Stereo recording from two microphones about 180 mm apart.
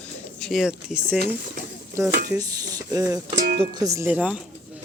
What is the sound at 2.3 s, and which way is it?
Speech, 20° right (ahead or behind).